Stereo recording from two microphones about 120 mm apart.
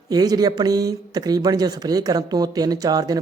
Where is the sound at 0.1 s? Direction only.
35° right (ahead or behind).